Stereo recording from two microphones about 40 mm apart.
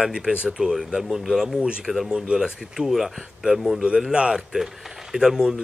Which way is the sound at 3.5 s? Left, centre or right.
Centre.